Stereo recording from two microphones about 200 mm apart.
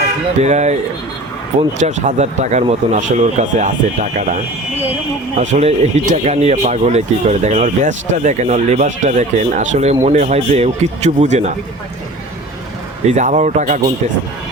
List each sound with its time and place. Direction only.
0.4 s speech: 35° right (ahead or behind)
1.8 s speech: 35° right (ahead or behind)
5.4 s speech: 35° right (ahead or behind)
13.1 s speech: 35° right (ahead or behind)